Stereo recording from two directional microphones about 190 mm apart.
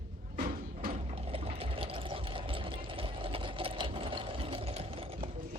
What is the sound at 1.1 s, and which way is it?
Sewing machine, 30° right (ahead or behind).